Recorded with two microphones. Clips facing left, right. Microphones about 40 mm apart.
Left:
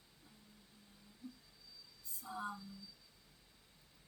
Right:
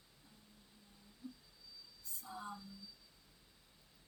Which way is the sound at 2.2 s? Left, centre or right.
Left.